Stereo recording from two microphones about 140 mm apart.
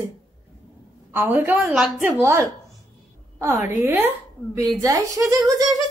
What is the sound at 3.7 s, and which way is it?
A woman's voice, 15° right (ahead or behind).